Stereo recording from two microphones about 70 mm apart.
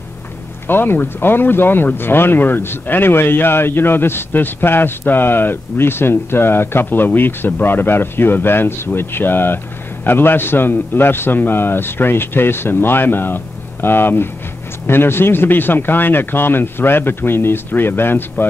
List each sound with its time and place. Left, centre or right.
0.7 s speech: left